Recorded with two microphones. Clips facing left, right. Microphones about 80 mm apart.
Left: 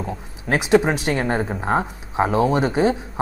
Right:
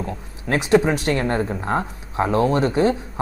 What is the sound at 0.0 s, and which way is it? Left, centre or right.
Speech, centre.